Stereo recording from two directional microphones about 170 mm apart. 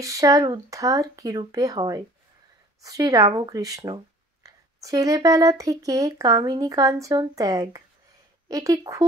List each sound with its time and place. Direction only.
0.0 s speech: 20° right (ahead or behind)